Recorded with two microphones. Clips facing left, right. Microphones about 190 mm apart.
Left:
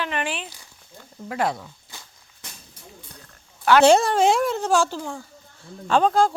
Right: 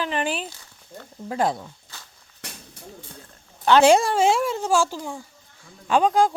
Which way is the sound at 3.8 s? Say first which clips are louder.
Left 1 dB; 10° right (ahead or behind).